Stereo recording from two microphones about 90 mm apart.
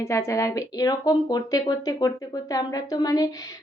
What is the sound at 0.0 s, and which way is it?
A woman's voice, 30° left (ahead or behind).